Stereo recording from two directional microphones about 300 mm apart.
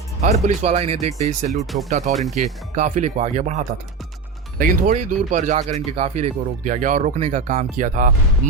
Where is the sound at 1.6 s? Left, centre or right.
Centre.